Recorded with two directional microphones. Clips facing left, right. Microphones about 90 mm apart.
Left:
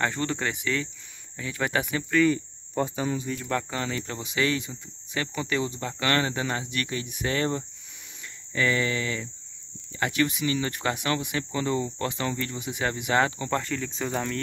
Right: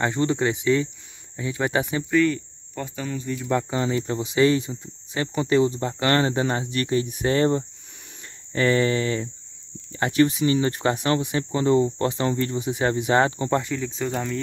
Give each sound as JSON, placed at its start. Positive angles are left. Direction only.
{"t": 0.0, "sound": "speech", "side_deg": -20}
{"t": 2.7, "sound": "speech", "side_deg": 20}
{"t": 3.4, "sound": "speech", "side_deg": -20}
{"t": 13.6, "sound": "speech", "side_deg": -5}